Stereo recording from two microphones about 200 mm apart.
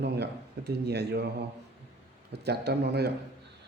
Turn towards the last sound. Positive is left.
turn(degrees=-55)  # may be behind; listen again after turning